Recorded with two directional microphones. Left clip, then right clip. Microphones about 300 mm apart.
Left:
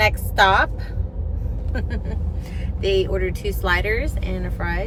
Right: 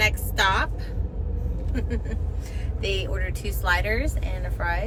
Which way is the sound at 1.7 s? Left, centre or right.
Centre.